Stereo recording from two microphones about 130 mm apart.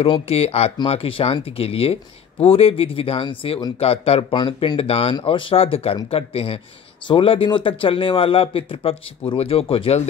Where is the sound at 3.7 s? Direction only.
50° left (ahead or behind).